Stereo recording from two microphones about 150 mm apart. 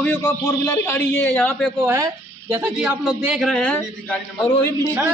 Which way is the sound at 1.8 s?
20° right (ahead or behind).